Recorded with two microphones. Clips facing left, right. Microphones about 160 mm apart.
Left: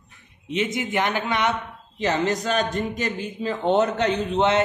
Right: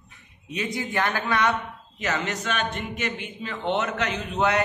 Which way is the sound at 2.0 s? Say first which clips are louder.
Left 6 dB; 30° left (ahead or behind).